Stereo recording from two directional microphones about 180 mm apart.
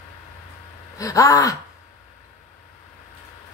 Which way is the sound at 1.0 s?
20° left (ahead or behind).